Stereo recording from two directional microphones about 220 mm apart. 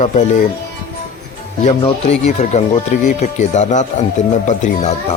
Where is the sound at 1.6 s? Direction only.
30° left (ahead or behind).